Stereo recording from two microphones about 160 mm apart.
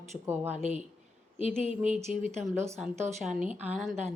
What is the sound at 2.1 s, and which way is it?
Speech, 50° right (ahead or behind).